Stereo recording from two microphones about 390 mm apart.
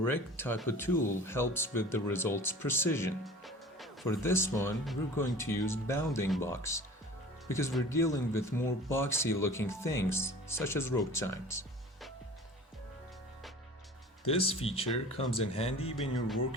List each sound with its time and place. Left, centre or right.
0.0 s speech: centre
14.3 s speech: centre
14.8 s speech: left
15.5 s speech: centre